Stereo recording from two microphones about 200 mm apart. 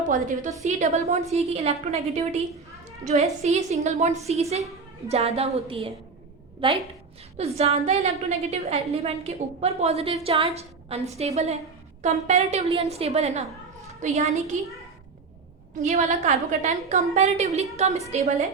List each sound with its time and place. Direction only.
0.0 s a woman's voice: 40° right (ahead or behind)
15.8 s a woman's voice: 35° right (ahead or behind)